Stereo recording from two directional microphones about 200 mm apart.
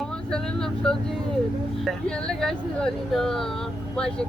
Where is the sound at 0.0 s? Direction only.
5° left (ahead or behind).